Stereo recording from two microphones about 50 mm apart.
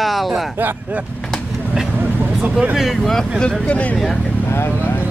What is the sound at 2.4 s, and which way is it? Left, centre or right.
Speech, right.